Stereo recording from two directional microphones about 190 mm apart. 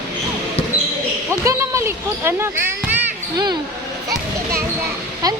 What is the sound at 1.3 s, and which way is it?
Speech, 15° right (ahead or behind).